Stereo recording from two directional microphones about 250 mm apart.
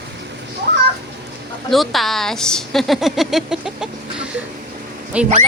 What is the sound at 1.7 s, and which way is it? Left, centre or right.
A woman's voice, centre.